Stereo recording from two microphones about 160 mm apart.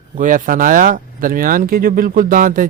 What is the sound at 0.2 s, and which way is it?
Speech, 55° right (ahead or behind).